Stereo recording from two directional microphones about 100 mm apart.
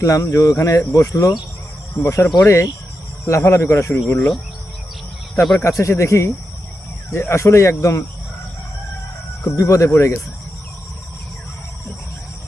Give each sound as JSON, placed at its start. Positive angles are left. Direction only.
{"t": 0.0, "sound": "speech", "side_deg": 35}
{"t": 2.4, "sound": "speech", "side_deg": 30}
{"t": 5.3, "sound": "speech", "side_deg": 5}
{"t": 5.5, "sound": "speech", "side_deg": 30}
{"t": 9.4, "sound": "speech", "side_deg": 35}